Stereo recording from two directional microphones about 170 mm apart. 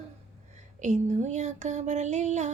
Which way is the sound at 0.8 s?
45° right (ahead or behind).